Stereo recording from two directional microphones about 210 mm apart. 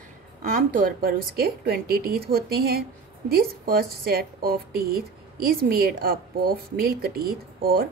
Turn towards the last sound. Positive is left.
turn(degrees=-45)  # may be behind; listen again after turning